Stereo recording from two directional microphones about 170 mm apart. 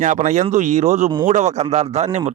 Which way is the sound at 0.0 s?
45° right (ahead or behind).